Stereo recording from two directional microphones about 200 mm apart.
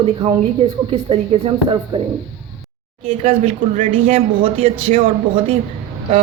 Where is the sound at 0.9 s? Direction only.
30° right (ahead or behind).